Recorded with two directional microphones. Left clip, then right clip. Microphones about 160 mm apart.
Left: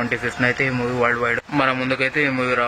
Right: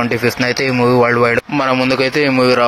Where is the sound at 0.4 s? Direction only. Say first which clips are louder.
Right 2 dB; 30° right (ahead or behind).